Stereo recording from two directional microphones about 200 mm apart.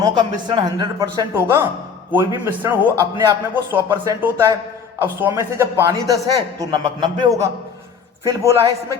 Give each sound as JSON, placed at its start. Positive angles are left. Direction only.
{"t": 0.0, "sound": "a man's voice", "side_deg": -20}